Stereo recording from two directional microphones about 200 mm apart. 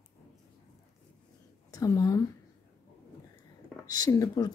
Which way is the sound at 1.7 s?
20° left (ahead or behind).